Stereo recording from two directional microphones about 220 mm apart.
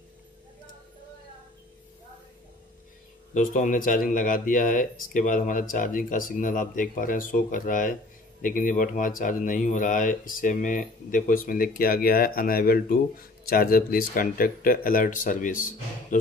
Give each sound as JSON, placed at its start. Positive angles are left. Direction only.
{"t": 3.3, "sound": "speech", "side_deg": 35}